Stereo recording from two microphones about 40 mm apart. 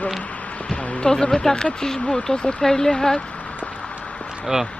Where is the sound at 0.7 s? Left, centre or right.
Left.